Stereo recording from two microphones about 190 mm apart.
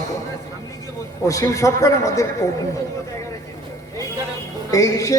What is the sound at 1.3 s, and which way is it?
A man's voice, 15° left (ahead or behind).